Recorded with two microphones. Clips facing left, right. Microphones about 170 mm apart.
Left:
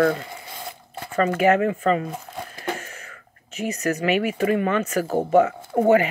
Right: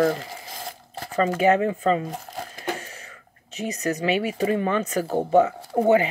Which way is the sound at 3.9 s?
30° right (ahead or behind).